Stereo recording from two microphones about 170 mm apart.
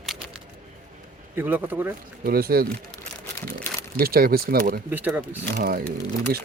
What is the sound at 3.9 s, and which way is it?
Speech, 60° right (ahead or behind).